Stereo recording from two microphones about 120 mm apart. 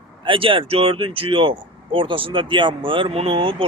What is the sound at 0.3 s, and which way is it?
Speech, 45° right (ahead or behind).